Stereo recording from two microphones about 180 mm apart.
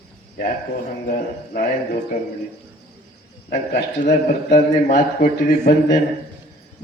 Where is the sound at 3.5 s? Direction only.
50° left (ahead or behind).